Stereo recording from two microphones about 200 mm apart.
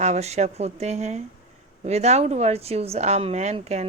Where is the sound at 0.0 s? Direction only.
35° right (ahead or behind).